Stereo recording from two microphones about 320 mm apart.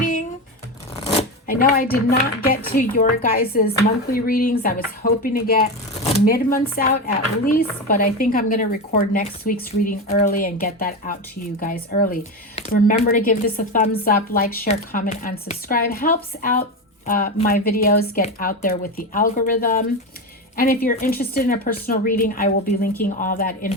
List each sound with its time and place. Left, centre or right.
0.0 s shuffling cards: left
0.9 s speech: left
20.8 s speech: left